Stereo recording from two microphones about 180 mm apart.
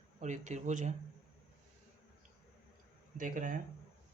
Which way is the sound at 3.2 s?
45° right (ahead or behind).